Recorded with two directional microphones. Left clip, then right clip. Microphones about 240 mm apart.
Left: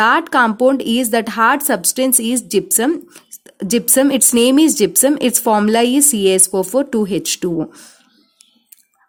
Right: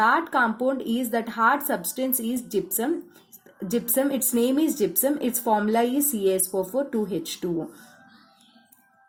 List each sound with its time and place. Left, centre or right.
0.0 s speech: left